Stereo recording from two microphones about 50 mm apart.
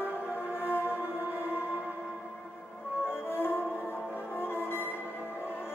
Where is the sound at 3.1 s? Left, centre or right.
Left.